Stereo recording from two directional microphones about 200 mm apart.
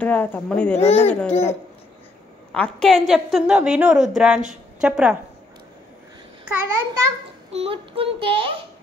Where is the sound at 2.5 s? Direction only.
5° left (ahead or behind).